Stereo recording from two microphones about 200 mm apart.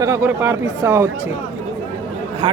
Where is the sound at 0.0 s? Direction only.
15° right (ahead or behind).